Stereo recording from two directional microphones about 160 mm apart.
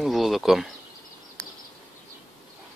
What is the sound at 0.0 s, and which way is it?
Speech, centre (ahead or behind).